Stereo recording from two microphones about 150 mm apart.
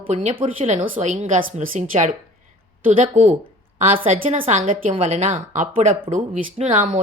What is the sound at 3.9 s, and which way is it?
Speech, 40° right (ahead or behind).